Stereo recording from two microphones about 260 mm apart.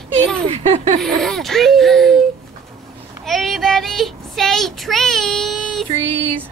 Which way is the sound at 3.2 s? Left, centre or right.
Centre.